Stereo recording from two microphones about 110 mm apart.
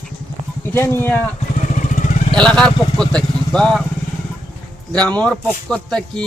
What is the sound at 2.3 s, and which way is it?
Speech, 5° left (ahead or behind).